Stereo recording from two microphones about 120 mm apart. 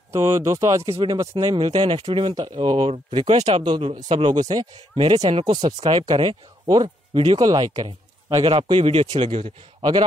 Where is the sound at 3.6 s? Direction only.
45° right (ahead or behind).